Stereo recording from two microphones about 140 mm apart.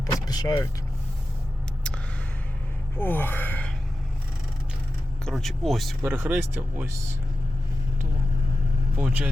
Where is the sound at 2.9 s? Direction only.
15° left (ahead or behind).